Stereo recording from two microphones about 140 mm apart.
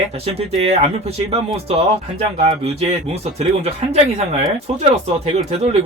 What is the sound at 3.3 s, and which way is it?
Speech, 45° right (ahead or behind).